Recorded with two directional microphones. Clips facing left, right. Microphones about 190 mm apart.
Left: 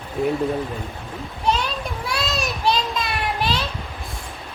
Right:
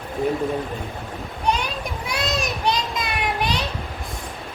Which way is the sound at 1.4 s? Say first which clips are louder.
Left 1 dB; 15° right (ahead or behind).